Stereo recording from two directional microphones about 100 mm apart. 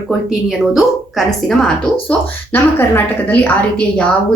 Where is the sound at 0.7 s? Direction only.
Centre (ahead or behind).